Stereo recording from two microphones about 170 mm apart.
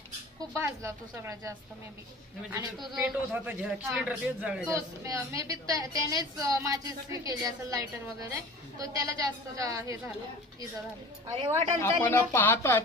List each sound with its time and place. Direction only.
0.5 s speech: 15° right (ahead or behind)
2.7 s a man's voice: centre (ahead or behind)
4.7 s a woman's voice: 20° right (ahead or behind)
11.3 s speech: 35° right (ahead or behind)
11.8 s a woman's voice: 15° left (ahead or behind)